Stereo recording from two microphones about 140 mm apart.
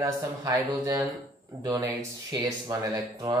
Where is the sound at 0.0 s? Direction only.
25° right (ahead or behind).